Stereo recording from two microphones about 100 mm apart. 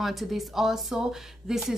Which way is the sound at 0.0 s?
Centre (ahead or behind).